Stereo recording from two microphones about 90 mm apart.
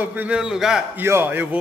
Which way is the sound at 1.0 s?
25° right (ahead or behind).